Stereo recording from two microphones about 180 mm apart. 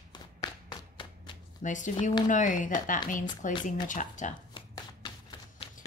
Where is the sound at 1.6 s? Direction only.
45° left (ahead or behind).